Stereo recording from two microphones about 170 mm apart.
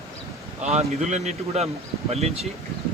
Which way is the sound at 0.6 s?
40° right (ahead or behind).